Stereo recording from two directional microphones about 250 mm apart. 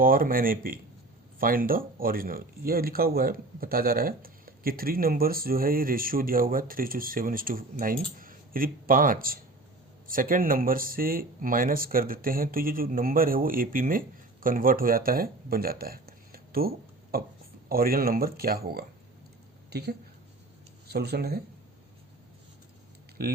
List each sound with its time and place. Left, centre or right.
0.0 s speech: right
23.2 s speech: right